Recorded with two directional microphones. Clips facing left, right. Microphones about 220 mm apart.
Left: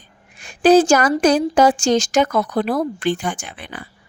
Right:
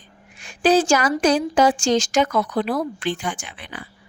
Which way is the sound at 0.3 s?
40° left (ahead or behind).